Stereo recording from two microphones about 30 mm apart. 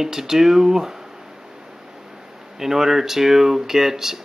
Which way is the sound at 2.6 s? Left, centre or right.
Centre.